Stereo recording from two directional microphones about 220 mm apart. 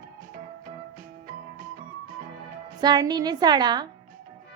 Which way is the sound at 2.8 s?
20° right (ahead or behind).